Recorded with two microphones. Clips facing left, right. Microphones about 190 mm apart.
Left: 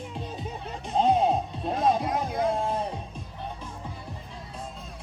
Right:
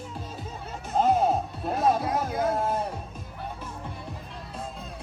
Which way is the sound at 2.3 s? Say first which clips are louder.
Even; 5° right (ahead or behind).